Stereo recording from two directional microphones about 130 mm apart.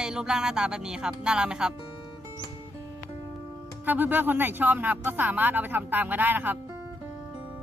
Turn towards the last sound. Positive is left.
turn(degrees=-15)  # may be behind; listen again after turning